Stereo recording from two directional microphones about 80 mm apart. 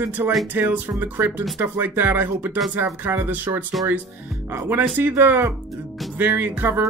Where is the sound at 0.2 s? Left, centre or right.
Right.